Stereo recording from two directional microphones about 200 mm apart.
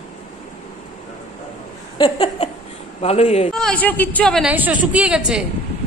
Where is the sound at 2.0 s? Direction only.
30° left (ahead or behind).